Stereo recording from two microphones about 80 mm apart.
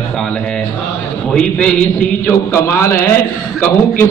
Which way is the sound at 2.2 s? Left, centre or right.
Left.